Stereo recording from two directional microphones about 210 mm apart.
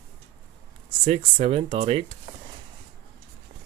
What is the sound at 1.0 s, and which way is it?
Speech, 30° right (ahead or behind).